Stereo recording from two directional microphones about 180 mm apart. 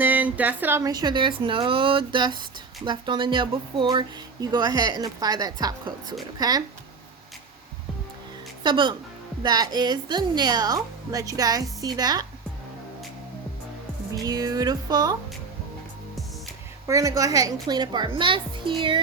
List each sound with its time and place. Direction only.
0.0 s a woman's voice: 10° right (ahead or behind)
8.6 s a woman's voice: 25° right (ahead or behind)
14.1 s a woman's voice: 20° right (ahead or behind)
16.8 s a woman's voice: 15° right (ahead or behind)